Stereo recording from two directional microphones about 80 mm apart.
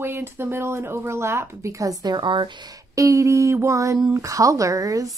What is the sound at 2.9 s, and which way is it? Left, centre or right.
Speech, right.